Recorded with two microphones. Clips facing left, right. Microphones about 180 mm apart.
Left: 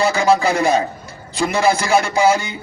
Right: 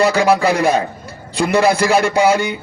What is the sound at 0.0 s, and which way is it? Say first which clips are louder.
Speech: right 2 dB; 65° right (ahead or behind).